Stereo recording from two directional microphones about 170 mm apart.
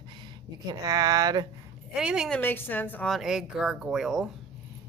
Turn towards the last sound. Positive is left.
turn(degrees=0)  # may be behind; listen again after turning